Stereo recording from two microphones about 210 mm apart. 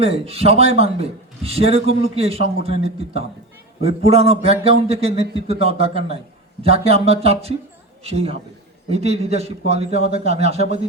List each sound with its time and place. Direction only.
0.0 s a man's voice: 30° right (ahead or behind)